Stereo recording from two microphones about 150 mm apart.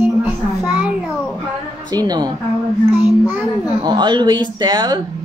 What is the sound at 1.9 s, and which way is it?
Speech, 25° right (ahead or behind).